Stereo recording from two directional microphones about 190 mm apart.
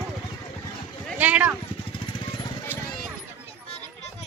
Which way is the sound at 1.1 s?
5° right (ahead or behind).